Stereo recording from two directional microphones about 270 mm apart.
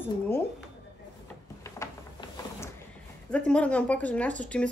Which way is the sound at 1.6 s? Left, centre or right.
Centre.